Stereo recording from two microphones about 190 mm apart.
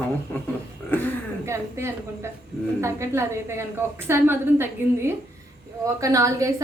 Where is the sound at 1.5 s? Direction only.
15° right (ahead or behind).